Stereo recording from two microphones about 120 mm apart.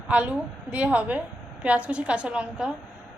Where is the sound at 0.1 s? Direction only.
10° right (ahead or behind).